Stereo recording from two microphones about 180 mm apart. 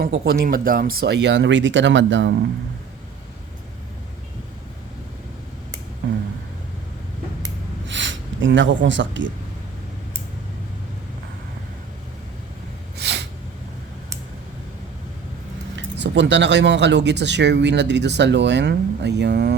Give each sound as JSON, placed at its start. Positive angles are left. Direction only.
{"t": 0.0, "sound": "speech", "side_deg": -60}
{"t": 7.9, "sound": "gasp", "side_deg": -90}
{"t": 13.0, "sound": "a sound", "side_deg": -70}
{"t": 15.7, "sound": "speech", "side_deg": -80}